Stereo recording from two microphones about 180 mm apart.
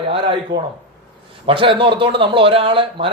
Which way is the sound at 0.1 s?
30° right (ahead or behind).